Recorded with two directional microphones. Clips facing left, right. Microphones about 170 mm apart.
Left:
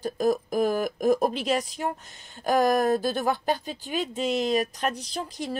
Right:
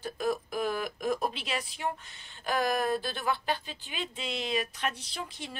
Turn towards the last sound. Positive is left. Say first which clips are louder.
# left 8 dB
turn(degrees=40)  # may be behind; listen again after turning